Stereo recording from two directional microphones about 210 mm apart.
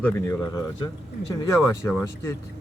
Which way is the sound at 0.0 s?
15° left (ahead or behind).